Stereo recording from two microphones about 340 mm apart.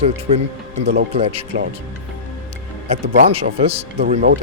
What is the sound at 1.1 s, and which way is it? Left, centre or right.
Speech, centre.